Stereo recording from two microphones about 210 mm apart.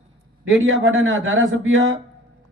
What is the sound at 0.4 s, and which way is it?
A man's voice, 70° right (ahead or behind).